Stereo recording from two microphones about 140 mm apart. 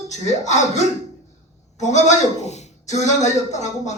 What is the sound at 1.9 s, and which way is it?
Speech, 55° left (ahead or behind).